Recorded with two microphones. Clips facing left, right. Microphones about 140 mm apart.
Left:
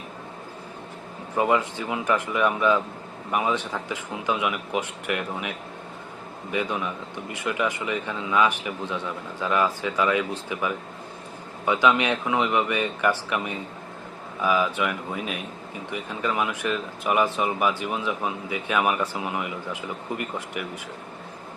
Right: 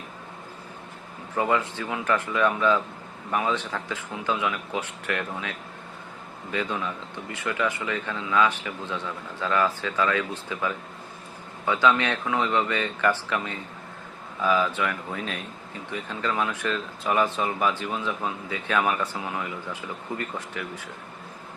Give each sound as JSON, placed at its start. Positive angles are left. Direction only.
{"t": 1.4, "sound": "speech", "side_deg": 15}